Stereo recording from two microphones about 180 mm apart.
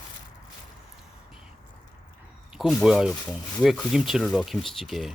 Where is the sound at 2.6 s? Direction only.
Centre (ahead or behind).